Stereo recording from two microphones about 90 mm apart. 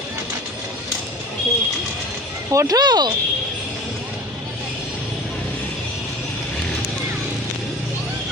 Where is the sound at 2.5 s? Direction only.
45° right (ahead or behind).